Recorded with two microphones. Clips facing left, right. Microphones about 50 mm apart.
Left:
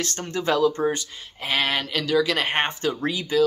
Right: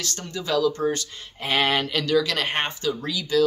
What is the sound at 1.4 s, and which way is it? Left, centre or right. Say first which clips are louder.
Speech: right 2 dB; centre.